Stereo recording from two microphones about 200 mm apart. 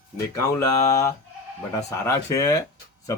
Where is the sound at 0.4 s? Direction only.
15° left (ahead or behind).